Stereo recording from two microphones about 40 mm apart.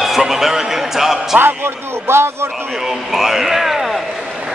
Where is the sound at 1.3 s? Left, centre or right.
Right.